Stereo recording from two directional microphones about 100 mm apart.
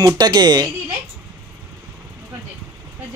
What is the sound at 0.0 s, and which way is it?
Speech, 45° right (ahead or behind).